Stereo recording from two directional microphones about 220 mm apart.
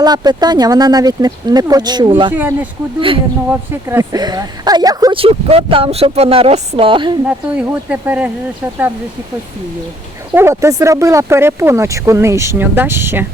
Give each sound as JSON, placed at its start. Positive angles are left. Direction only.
{"t": 0.0, "sound": "speech", "side_deg": -20}
{"t": 2.3, "sound": "speech", "side_deg": -10}
{"t": 7.3, "sound": "speech", "side_deg": -5}
{"t": 10.3, "sound": "speech", "side_deg": -10}